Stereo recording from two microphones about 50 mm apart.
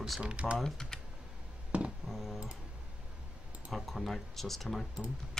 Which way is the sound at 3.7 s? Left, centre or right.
Centre.